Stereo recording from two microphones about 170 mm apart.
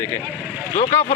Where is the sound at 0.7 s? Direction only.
45° left (ahead or behind).